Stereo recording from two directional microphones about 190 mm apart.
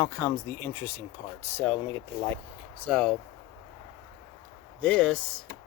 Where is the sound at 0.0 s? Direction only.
15° left (ahead or behind).